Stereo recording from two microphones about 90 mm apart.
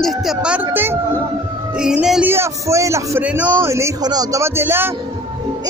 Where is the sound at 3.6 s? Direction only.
30° right (ahead or behind).